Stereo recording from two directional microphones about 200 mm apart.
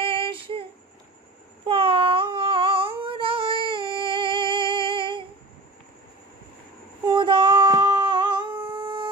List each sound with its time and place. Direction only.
0.0 s child singing: 25° right (ahead or behind)
1.6 s a sound: 25° right (ahead or behind)
3.0 s singing: 25° right (ahead or behind)
7.1 s child singing: 25° right (ahead or behind)